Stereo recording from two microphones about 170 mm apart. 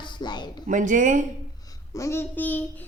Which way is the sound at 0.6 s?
50° right (ahead or behind).